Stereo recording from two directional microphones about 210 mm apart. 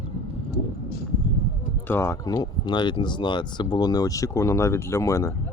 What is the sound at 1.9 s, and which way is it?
Speech, 10° left (ahead or behind).